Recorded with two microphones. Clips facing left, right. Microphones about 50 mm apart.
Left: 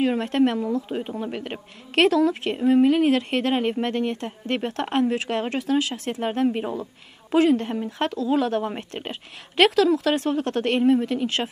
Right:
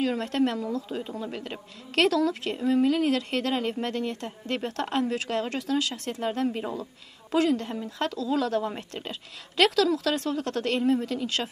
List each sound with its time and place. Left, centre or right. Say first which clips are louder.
0.0 s a woman's voice: left 5 dB; left
0.8 s a woman's voice: left 4 dB; left